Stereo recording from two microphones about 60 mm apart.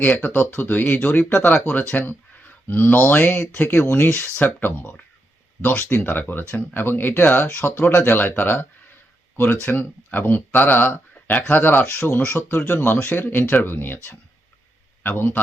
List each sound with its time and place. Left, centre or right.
0.0 s speech: left